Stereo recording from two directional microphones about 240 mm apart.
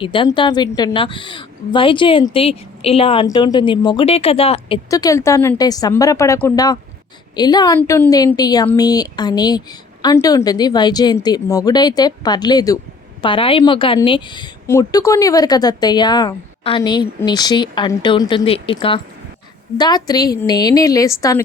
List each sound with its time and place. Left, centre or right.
0.0 s a woman's voice: left